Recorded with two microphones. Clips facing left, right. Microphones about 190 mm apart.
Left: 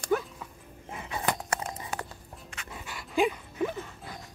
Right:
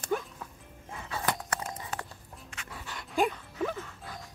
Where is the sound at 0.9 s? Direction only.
15° left (ahead or behind).